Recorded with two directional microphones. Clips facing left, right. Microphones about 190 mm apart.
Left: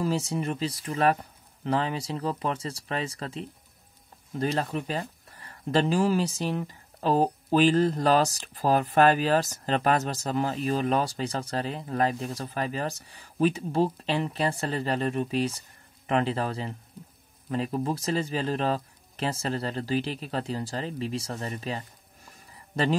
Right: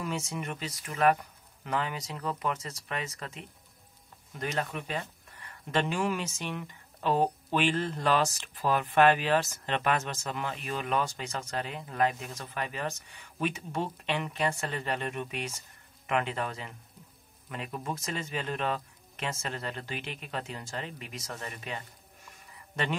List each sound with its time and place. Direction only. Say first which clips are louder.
0.0 s speech: left 7 dB; 35° left (ahead or behind)